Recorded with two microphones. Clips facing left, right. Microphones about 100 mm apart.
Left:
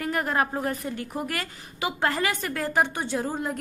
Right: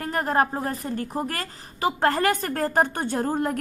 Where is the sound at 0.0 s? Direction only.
35° right (ahead or behind).